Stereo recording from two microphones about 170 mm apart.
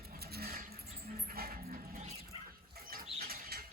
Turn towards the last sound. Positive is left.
turn(degrees=-65)  # may be behind; listen again after turning